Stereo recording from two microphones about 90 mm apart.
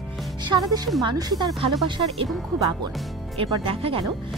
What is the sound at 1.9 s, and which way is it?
Speech, 65° right (ahead or behind).